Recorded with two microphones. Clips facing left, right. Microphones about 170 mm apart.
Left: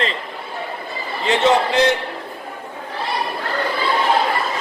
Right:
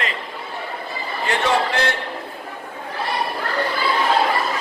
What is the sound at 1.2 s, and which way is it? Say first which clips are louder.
Speech: left 4 dB; 20° left (ahead or behind).